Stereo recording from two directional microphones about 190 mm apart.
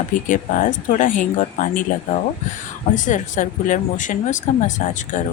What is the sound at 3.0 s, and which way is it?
Speech, 40° left (ahead or behind).